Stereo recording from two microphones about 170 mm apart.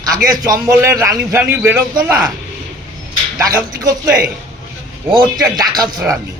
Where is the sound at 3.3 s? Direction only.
20° right (ahead or behind).